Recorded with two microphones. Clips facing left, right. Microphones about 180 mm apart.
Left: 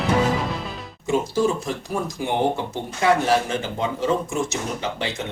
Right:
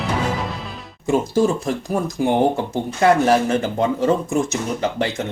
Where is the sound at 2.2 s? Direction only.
50° right (ahead or behind).